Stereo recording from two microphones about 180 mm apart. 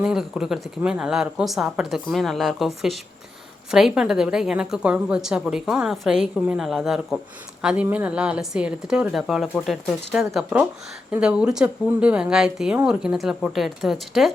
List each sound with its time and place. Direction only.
0.0 s a woman's voice: 5° right (ahead or behind)